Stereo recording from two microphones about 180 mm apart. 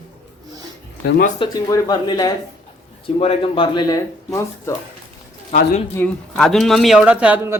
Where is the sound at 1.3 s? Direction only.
25° left (ahead or behind).